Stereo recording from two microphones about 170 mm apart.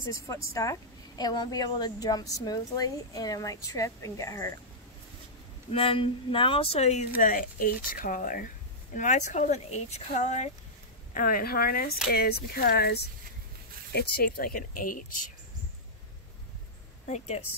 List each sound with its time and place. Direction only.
0.0 s a woman's voice: 20° left (ahead or behind)
5.7 s speech: 35° left (ahead or behind)
7.2 s speech: 50° left (ahead or behind)
11.1 s speech: 55° left (ahead or behind)